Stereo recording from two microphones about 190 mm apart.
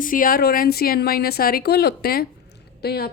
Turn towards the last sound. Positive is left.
turn(degrees=55)  # may be behind; listen again after turning